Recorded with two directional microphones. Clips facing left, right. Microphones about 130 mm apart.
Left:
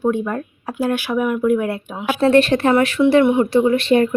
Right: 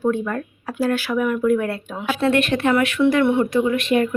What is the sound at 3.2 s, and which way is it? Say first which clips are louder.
Speech: left 2 dB; 15° left (ahead or behind).